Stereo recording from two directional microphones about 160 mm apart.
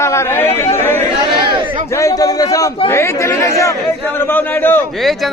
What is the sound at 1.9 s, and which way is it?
A man's voice, 20° left (ahead or behind).